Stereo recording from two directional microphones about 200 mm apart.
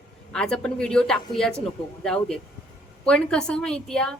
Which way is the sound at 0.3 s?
5° left (ahead or behind).